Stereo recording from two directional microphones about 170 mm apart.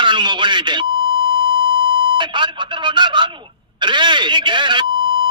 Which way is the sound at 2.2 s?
30° right (ahead or behind).